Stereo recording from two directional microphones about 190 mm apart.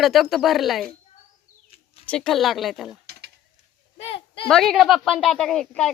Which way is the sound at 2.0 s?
5° left (ahead or behind).